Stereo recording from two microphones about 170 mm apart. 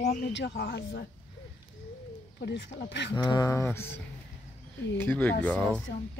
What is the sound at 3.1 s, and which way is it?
Speech, 25° left (ahead or behind).